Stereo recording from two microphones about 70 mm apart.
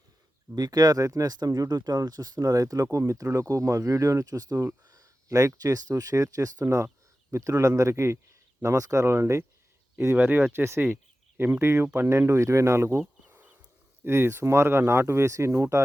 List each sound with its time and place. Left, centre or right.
0.5 s speech: right
3.0 s speech: right
6.8 s a sound: right
7.4 s speech: right
10.2 s speech: right
13.2 s a sound: right
14.0 s speech: right